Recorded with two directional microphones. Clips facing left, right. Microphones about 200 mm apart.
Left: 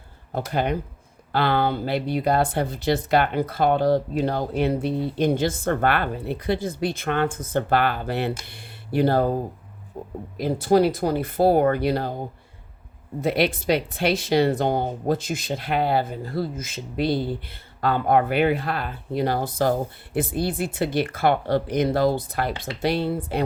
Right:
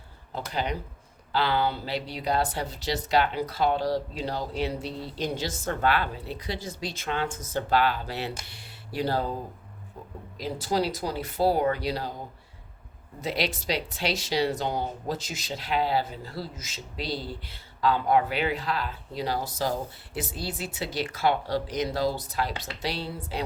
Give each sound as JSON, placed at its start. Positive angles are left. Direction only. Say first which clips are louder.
{"t": 0.3, "sound": "speech", "louder": "left 6 dB", "side_deg": 55}
{"t": 13.2, "sound": "speech", "louder": "left 8 dB", "side_deg": 55}